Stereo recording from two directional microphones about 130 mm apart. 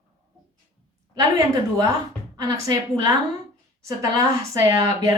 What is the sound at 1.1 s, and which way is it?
A woman's voice, 25° right (ahead or behind).